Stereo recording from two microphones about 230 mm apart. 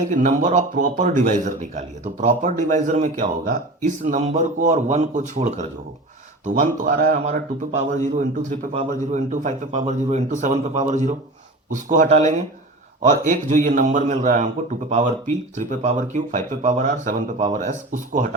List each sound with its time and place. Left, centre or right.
0.1 s speech: right